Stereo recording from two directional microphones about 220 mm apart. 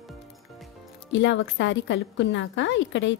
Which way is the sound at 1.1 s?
55° left (ahead or behind).